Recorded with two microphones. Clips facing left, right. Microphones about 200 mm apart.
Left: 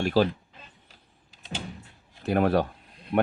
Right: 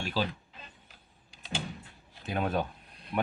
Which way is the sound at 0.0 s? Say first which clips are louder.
Left 10 dB; 55° left (ahead or behind).